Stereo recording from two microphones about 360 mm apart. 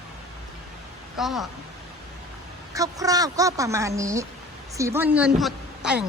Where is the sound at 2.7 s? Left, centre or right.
Centre.